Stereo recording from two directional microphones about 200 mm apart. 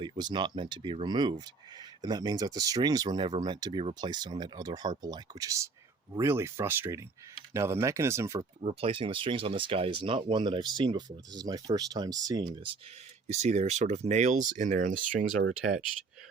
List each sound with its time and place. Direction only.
0.0 s speech: 20° right (ahead or behind)
8.6 s speech: 30° right (ahead or behind)
13.2 s speech: 35° right (ahead or behind)